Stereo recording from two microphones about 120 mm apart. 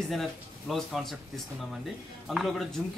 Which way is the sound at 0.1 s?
Centre (ahead or behind).